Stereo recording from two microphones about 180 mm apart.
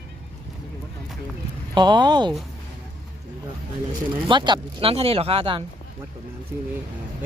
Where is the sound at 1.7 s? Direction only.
25° right (ahead or behind).